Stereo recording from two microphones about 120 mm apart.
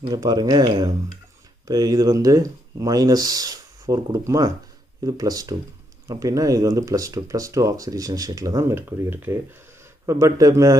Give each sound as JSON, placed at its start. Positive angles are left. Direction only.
{"t": 0.1, "sound": "speech", "side_deg": -35}